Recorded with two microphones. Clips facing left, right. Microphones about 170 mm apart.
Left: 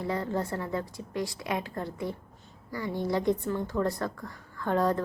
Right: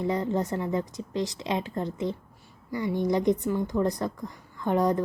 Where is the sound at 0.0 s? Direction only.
20° right (ahead or behind).